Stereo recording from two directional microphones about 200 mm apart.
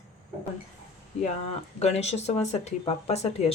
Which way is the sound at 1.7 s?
30° left (ahead or behind).